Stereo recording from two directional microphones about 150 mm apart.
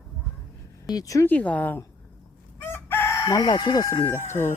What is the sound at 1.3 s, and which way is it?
Speech, 10° left (ahead or behind).